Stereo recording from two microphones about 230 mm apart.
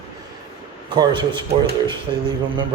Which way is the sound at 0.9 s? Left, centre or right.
Centre.